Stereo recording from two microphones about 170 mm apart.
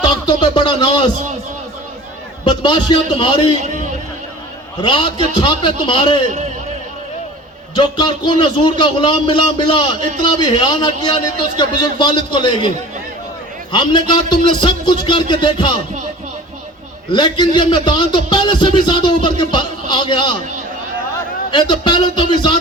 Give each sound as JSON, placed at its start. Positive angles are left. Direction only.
{"t": 0.0, "sound": "music", "side_deg": 25}
{"t": 2.4, "sound": "a man's voice", "side_deg": 25}
{"t": 4.8, "sound": "a man's voice", "side_deg": 30}
{"t": 6.2, "sound": "a man's voice", "side_deg": -40}
{"t": 7.8, "sound": "a man's voice", "side_deg": 25}
{"t": 13.7, "sound": "a man's voice", "side_deg": 25}
{"t": 17.1, "sound": "a man's voice", "side_deg": 25}
{"t": 21.5, "sound": "a man's voice", "side_deg": 25}